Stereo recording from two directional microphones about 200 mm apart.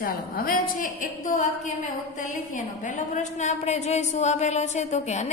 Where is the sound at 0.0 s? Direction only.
45° left (ahead or behind).